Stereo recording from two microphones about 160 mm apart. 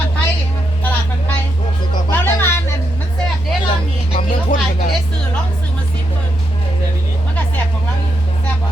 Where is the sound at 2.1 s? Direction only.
15° left (ahead or behind).